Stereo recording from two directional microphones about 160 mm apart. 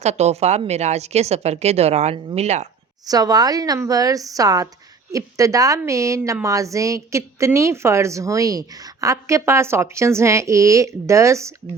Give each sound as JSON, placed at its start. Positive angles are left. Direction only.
{"t": 0.0, "sound": "a woman's voice", "side_deg": -40}
{"t": 3.1, "sound": "a woman's voice", "side_deg": -25}